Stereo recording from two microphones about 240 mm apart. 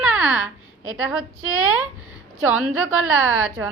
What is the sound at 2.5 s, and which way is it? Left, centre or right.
Speech, right.